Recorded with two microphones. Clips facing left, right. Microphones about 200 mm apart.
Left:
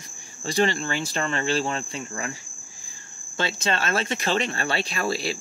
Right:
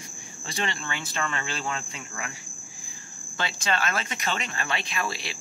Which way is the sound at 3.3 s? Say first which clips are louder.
Left 3 dB; 25° left (ahead or behind).